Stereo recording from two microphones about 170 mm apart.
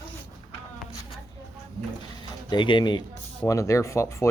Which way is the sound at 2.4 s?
30° left (ahead or behind).